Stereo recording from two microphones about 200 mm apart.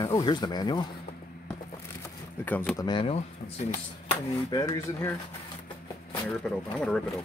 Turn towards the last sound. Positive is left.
turn(degrees=5)  # may be behind; listen again after turning